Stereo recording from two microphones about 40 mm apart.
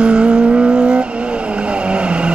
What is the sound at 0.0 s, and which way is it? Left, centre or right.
Vehicle, right.